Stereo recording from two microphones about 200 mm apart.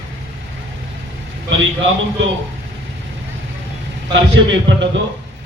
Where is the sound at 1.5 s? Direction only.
70° right (ahead or behind).